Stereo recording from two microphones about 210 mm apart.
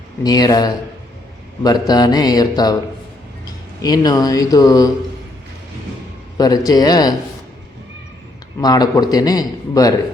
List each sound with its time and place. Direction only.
0.2 s a man's voice: 20° left (ahead or behind)
1.9 s a man's voice: 20° left (ahead or behind)
6.3 s a man's voice: 20° left (ahead or behind)
8.6 s a man's voice: 20° left (ahead or behind)